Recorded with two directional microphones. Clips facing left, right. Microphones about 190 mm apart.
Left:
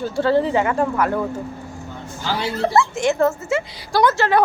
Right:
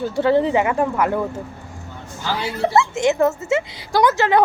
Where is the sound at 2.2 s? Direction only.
15° right (ahead or behind).